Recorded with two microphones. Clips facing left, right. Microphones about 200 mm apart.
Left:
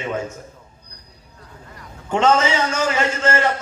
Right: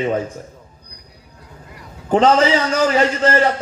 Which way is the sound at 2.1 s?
35° right (ahead or behind).